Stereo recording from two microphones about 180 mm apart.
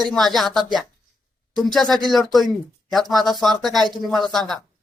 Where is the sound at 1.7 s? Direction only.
Centre (ahead or behind).